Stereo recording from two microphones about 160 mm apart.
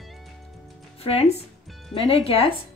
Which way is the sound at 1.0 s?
40° left (ahead or behind).